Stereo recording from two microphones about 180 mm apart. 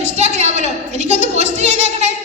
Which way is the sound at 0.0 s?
40° right (ahead or behind).